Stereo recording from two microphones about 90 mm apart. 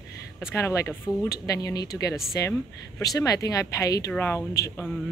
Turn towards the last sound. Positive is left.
turn(degrees=30)  # may be behind; listen again after turning